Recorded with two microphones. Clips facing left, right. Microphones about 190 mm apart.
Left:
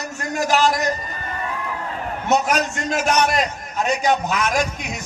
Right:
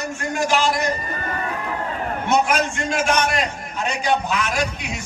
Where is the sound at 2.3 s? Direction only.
40° left (ahead or behind).